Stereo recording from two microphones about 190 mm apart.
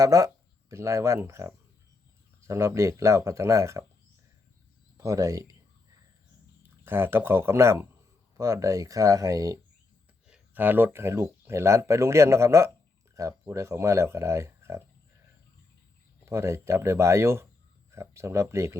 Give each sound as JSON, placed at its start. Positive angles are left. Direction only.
{"t": 0.0, "sound": "speech", "side_deg": -20}
{"t": 4.9, "sound": "speech", "side_deg": -15}
{"t": 6.6, "sound": "speech", "side_deg": -10}
{"t": 10.2, "sound": "speech", "side_deg": -5}
{"t": 16.2, "sound": "speech", "side_deg": -15}